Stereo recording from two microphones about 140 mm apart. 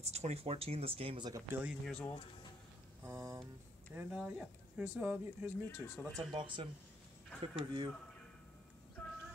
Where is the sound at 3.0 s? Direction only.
20° right (ahead or behind).